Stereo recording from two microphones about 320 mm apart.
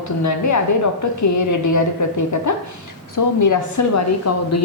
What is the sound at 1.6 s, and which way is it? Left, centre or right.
A woman's voice, left.